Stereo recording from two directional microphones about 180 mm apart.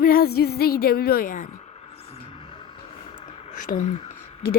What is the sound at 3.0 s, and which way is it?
Whispering, 30° left (ahead or behind).